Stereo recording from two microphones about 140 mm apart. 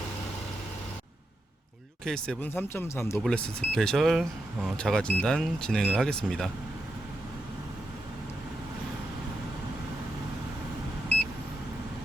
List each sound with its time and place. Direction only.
2.0 s speech: 5° left (ahead or behind)
3.2 s speech: 5° left (ahead or behind)